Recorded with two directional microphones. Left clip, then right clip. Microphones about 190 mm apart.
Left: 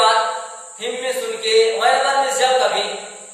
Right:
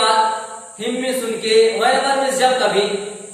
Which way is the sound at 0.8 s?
10° left (ahead or behind).